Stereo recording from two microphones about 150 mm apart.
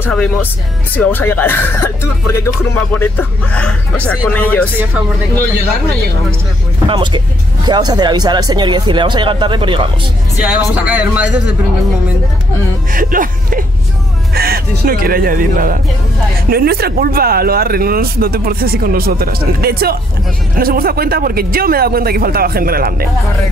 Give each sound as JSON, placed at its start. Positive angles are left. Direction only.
{"t": 0.0, "sound": "speech", "side_deg": 10}
{"t": 6.9, "sound": "speech", "side_deg": -30}
{"t": 10.4, "sound": "speech", "side_deg": -10}
{"t": 12.9, "sound": "speech", "side_deg": -65}
{"t": 14.3, "sound": "speech", "side_deg": -90}
{"t": 16.4, "sound": "speech", "side_deg": -90}
{"t": 20.5, "sound": "speech", "side_deg": -80}